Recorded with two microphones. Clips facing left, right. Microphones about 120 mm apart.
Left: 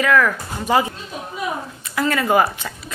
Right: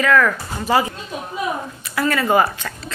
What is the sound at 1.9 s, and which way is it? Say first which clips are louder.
Speech: even; 15° left (ahead or behind).